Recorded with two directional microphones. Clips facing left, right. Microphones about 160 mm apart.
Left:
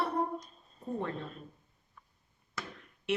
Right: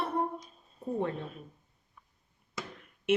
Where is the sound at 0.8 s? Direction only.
10° right (ahead or behind).